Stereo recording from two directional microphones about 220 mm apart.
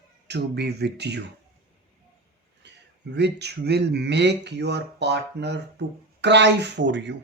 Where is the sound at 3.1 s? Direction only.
50° right (ahead or behind).